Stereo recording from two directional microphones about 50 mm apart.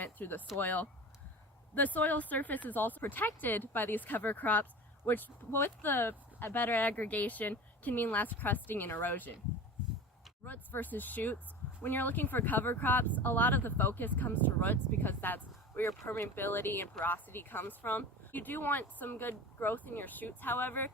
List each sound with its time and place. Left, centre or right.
0.0 s speech: left
5.0 s speech: left
10.4 s speech: left